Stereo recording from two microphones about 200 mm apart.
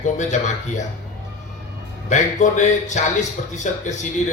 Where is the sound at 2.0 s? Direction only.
35° left (ahead or behind).